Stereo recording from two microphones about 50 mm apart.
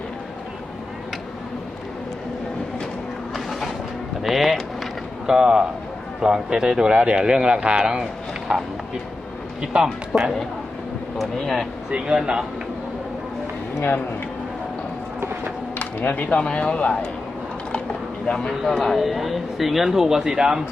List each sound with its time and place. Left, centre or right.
3.3 s vehicle: centre
5.2 s speech: centre
6.9 s speech: right
10.1 s a man's voice: centre
11.9 s speech: centre
13.7 s speech: left
15.8 s speech: left
18.3 s a man's voice: centre